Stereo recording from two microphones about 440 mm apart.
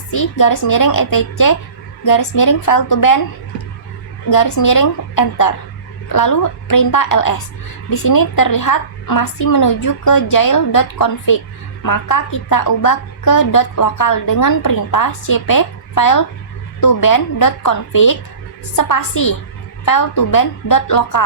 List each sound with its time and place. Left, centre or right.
0.1 s a woman's voice: left
4.3 s a woman's voice: left